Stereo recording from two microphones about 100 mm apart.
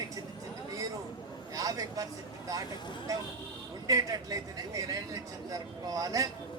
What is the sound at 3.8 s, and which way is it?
Speech, 35° right (ahead or behind).